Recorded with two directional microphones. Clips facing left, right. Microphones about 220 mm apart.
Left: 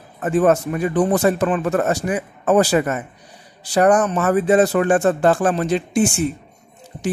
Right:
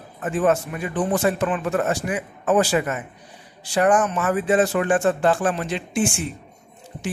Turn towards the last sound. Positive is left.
turn(degrees=40)  # may be behind; listen again after turning